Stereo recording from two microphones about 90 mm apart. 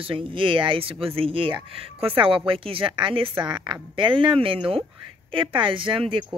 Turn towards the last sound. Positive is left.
turn(degrees=-80)